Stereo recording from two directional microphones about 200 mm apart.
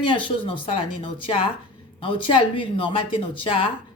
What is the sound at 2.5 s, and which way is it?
Speech, 25° left (ahead or behind).